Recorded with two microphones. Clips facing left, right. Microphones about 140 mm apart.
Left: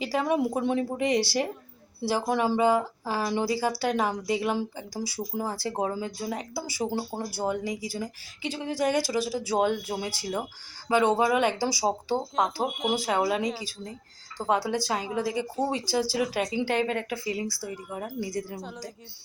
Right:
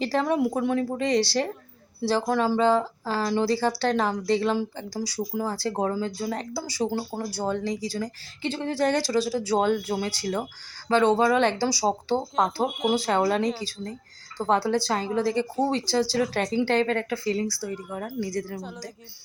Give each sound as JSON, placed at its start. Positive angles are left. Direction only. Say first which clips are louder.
{"t": 0.0, "sound": "speech", "louder": "right 2 dB", "side_deg": 5}
{"t": 0.3, "sound": "speech", "louder": "right 2 dB", "side_deg": 20}
{"t": 12.6, "sound": "speech", "louder": "right 3 dB", "side_deg": 0}
{"t": 16.2, "sound": "speech", "louder": "right 2 dB", "side_deg": 0}
{"t": 16.6, "sound": "speech", "louder": "right 5 dB", "side_deg": 10}